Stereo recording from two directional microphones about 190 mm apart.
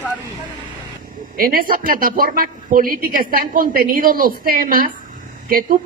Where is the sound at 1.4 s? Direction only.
50° right (ahead or behind).